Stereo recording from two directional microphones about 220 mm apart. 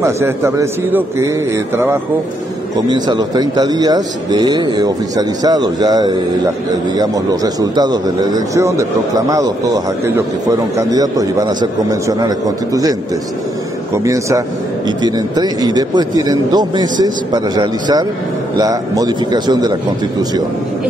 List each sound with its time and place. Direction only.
0.0 s a man's voice: 15° right (ahead or behind)
2.9 s a man's voice: 20° right (ahead or behind)
13.9 s a man's voice: 15° right (ahead or behind)